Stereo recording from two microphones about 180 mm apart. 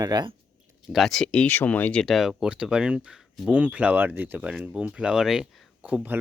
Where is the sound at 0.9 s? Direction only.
Centre (ahead or behind).